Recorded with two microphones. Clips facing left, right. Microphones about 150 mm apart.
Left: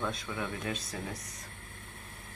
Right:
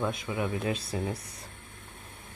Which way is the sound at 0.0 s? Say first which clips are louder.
Right 5 dB; 15° right (ahead or behind).